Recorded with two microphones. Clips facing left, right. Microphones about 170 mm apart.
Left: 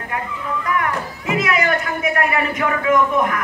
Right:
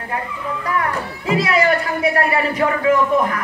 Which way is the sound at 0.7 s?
30° right (ahead or behind).